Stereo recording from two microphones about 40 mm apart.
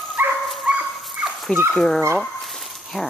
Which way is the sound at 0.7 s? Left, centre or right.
Right.